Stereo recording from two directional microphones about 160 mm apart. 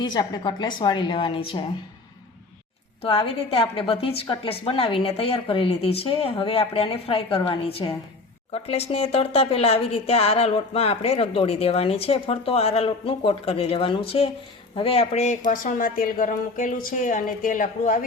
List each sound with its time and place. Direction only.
0.0 s a woman's voice: 25° left (ahead or behind)
3.0 s speech: 35° left (ahead or behind); by 18.0 s 55° left (ahead or behind)